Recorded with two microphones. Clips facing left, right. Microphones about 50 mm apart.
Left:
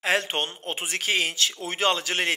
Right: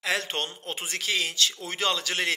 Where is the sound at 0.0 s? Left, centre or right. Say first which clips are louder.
Left 4 dB; left.